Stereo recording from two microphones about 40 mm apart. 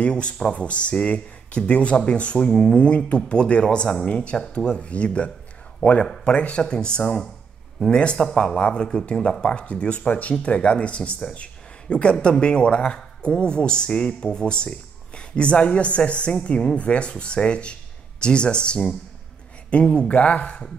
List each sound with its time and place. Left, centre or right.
0.0 s speech: left